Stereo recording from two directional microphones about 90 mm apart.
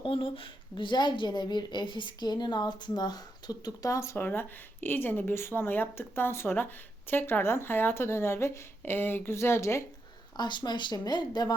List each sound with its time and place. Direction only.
0.0 s a woman's voice: 75° left (ahead or behind); by 3.9 s 50° left (ahead or behind)
3.9 s speech: 30° left (ahead or behind)
10.3 s speech: 55° left (ahead or behind)